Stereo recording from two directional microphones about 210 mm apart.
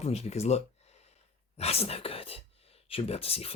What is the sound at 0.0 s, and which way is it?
Speech, 30° left (ahead or behind).